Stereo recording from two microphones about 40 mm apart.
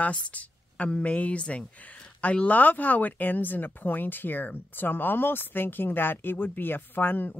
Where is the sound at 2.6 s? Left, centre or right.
Left.